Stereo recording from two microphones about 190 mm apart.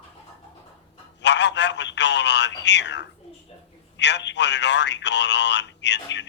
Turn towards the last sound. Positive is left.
turn(degrees=65)  # may be behind; listen again after turning